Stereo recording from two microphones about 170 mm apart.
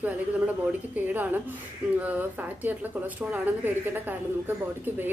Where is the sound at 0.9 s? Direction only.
10° right (ahead or behind).